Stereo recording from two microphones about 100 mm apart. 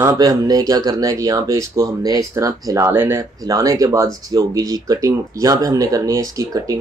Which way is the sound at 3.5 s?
35° right (ahead or behind).